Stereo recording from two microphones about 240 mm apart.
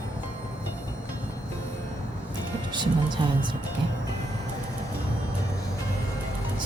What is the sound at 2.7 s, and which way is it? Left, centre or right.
Speech, centre.